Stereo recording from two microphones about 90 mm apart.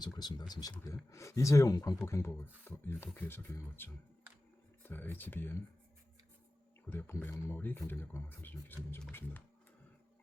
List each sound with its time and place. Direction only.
0.0 s speech: 50° left (ahead or behind)
1.7 s speech: 50° left (ahead or behind)
2.0 s speech: 30° left (ahead or behind)
6.9 s speech: 20° left (ahead or behind)
7.3 s speech: 35° left (ahead or behind)